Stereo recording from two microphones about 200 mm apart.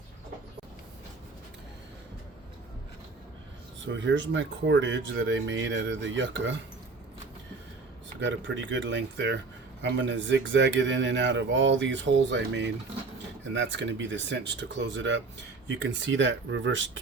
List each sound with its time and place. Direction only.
3.8 s speech: 65° right (ahead or behind)
8.2 s speech: 65° right (ahead or behind)